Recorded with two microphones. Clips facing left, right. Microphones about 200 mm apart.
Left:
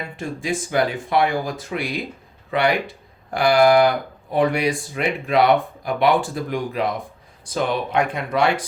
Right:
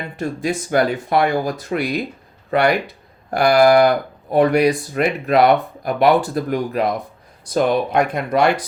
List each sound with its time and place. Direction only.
0.2 s speech: 40° right (ahead or behind)